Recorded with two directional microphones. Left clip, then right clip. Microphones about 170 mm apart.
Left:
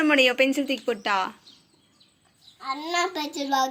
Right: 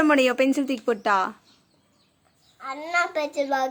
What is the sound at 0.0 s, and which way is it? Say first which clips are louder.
Speech: even; 45° right (ahead or behind).